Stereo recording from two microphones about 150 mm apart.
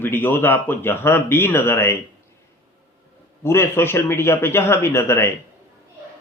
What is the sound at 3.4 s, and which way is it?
Speech, 15° left (ahead or behind).